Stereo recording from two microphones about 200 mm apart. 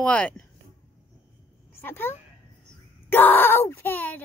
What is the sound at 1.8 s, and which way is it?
Speech, 10° left (ahead or behind).